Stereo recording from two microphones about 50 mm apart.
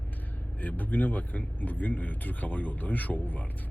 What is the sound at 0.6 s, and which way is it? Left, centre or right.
Speech, left.